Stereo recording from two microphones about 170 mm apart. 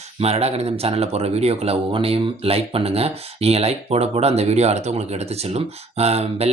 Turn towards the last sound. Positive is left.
turn(degrees=-35)  # may be behind; listen again after turning